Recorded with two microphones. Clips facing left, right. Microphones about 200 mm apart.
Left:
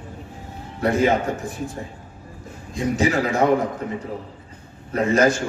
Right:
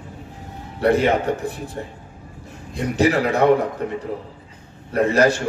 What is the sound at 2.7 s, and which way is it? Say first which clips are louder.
Speech: right 2 dB; 60° right (ahead or behind).